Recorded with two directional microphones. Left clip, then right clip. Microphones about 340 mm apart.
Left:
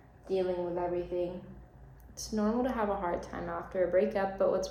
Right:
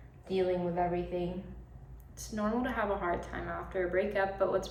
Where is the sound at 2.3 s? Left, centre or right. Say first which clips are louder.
Left 2 dB; centre.